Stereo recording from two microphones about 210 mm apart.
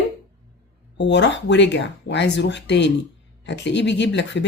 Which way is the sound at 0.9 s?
55° left (ahead or behind).